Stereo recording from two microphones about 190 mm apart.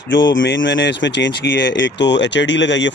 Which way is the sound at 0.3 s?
75° left (ahead or behind).